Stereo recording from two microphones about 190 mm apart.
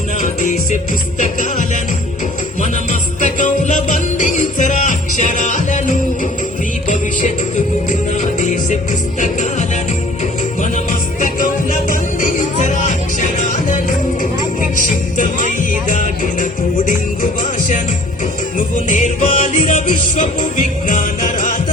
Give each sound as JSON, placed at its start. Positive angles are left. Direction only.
{"t": 0.2, "sound": "music", "side_deg": 40}
{"t": 11.2, "sound": "music", "side_deg": 45}
{"t": 14.8, "sound": "music", "side_deg": 45}
{"t": 18.5, "sound": "music", "side_deg": 40}